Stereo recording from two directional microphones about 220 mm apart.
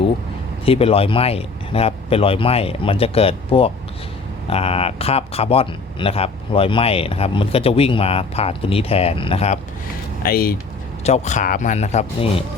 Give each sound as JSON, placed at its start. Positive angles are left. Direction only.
{"t": 0.6, "sound": "speech", "side_deg": 25}
{"t": 10.2, "sound": "speech", "side_deg": 45}
{"t": 11.0, "sound": "a man's voice", "side_deg": 30}